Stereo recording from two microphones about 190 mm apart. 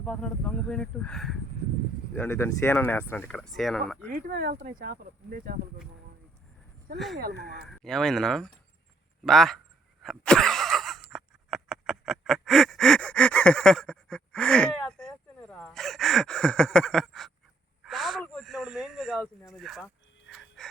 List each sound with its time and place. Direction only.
0.0 s speech: 5° left (ahead or behind)
4.1 s speech: 50° right (ahead or behind)
7.2 s speech: 55° right (ahead or behind)
7.7 s speech: centre (ahead or behind)
10.0 s a sound: centre (ahead or behind)
19.5 s speech: centre (ahead or behind)
20.3 s a sound: centre (ahead or behind)